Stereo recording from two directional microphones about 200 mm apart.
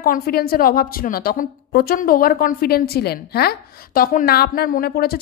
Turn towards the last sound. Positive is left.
turn(degrees=50)  # may be behind; listen again after turning